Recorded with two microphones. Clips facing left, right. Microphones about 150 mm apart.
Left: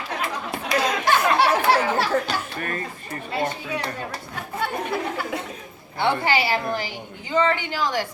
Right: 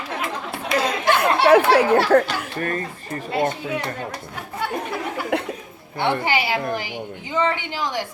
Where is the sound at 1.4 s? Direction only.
60° right (ahead or behind).